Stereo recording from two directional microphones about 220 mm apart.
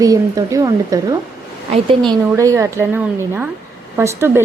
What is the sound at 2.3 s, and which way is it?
A woman's voice, 15° right (ahead or behind).